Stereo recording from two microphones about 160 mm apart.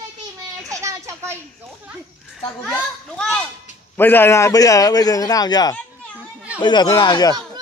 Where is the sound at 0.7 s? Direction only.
20° right (ahead or behind).